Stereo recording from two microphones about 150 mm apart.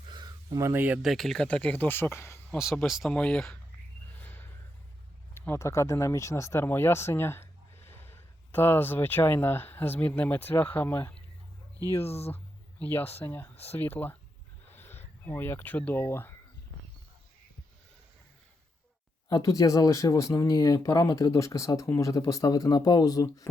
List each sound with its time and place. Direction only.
0.0 s a sound: 30° right (ahead or behind)
1.0 s speech: centre (ahead or behind)
2.8 s speech: centre (ahead or behind)
4.2 s a sound: 10° left (ahead or behind)
5.3 s speech: 20° left (ahead or behind)
19.3 s speech: 25° left (ahead or behind)